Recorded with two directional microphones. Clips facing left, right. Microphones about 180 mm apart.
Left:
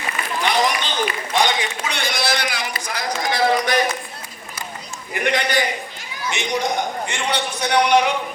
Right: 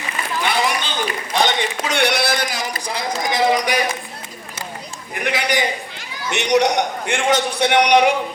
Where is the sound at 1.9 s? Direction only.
65° right (ahead or behind); by 2.9 s 40° right (ahead or behind).